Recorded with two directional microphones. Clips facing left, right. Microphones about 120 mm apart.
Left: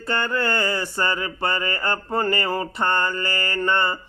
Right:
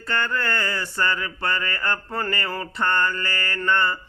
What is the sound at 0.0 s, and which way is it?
Mantra, 15° left (ahead or behind).